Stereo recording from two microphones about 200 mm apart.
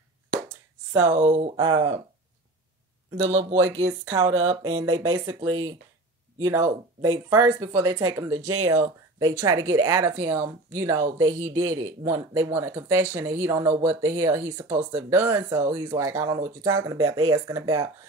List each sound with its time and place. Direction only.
1.0 s speech: 20° right (ahead or behind)
3.2 s speech: 30° right (ahead or behind)
4.3 s speech: 90° right
4.6 s speech: 25° right (ahead or behind)